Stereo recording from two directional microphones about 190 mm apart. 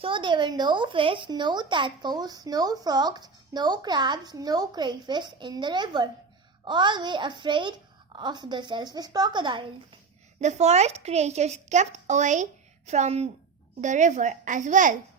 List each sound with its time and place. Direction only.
0.0 s speech: 25° right (ahead or behind)
10.4 s a child's voice: 35° right (ahead or behind)